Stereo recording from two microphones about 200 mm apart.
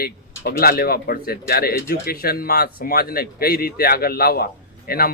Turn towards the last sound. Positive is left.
turn(degrees=50)  # may be behind; listen again after turning